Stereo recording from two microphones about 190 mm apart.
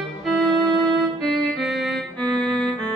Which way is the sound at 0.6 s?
25° right (ahead or behind).